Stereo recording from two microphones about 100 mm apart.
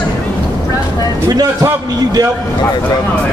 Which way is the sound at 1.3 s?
40° right (ahead or behind).